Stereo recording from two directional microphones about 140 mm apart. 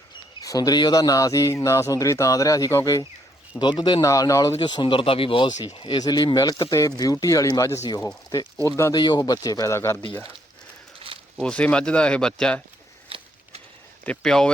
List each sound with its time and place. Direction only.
0.3 s speech: 25° left (ahead or behind)
4.5 s speech: 35° left (ahead or behind); by 10.0 s 20° left (ahead or behind)
11.0 s a sound: 40° right (ahead or behind)
11.4 s speech: 10° left (ahead or behind)
13.1 s a sound: 45° right (ahead or behind)
14.0 s speech: 5° left (ahead or behind)